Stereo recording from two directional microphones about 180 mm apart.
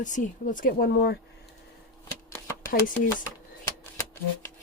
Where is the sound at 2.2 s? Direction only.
15° left (ahead or behind).